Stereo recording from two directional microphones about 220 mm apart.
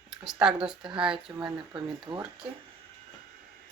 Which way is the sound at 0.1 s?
5° right (ahead or behind).